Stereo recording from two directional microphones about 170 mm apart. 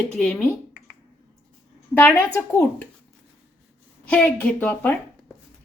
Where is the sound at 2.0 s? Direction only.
15° left (ahead or behind).